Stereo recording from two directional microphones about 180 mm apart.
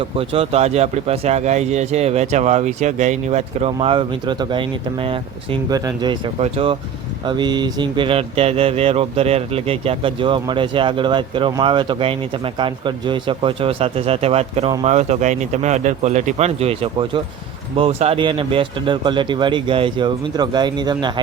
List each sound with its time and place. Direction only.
0.0 s speech: 30° right (ahead or behind)